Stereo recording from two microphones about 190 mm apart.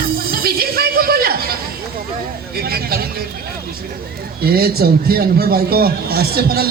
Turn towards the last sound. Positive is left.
turn(degrees=-55)  # may be behind; listen again after turning